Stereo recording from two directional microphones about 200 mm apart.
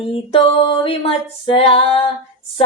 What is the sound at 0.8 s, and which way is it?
Female singing, 25° left (ahead or behind).